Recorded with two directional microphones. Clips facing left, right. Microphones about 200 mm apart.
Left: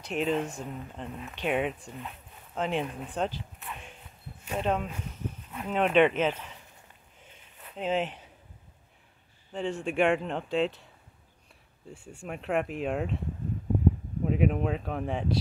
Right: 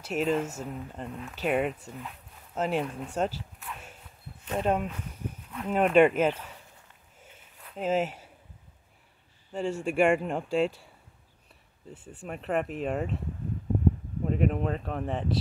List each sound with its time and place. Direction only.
0.0 s speech: 5° right (ahead or behind)
5.0 s a sound: 10° right (ahead or behind)
5.7 s speech: 5° right (ahead or behind)
7.2 s a sound: 5° right (ahead or behind)
7.6 s speech: 5° right (ahead or behind)
9.5 s speech: 10° right (ahead or behind)
11.9 s speech: 20° right (ahead or behind)
12.2 s speech: centre (ahead or behind)
14.2 s speech: 5° left (ahead or behind)